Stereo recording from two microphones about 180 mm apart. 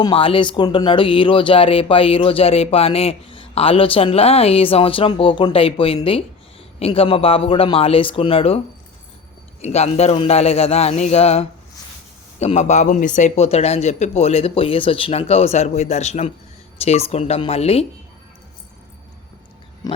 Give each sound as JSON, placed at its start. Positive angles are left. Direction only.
{"t": 0.0, "sound": "speech", "side_deg": 30}